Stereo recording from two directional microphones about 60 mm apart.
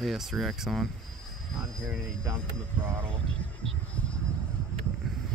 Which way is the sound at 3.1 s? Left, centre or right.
Centre.